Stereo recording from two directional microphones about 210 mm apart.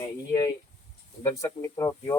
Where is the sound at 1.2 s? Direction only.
15° left (ahead or behind).